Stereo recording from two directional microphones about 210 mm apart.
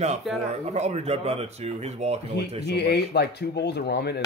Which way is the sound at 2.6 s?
55° left (ahead or behind).